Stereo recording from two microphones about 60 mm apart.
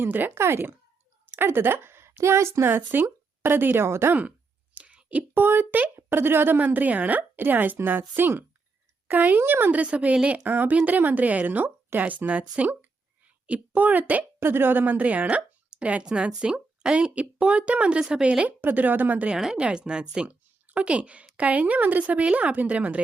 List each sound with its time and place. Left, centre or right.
0.0 s a woman's voice: right
0.3 s a woman's voice: right
3.8 s speech: right
4.1 s a sound: right
5.3 s a woman's voice: right
9.8 s speech: right
14.3 s a woman's voice: right
19.3 s speech: centre
20.2 s a woman's voice: right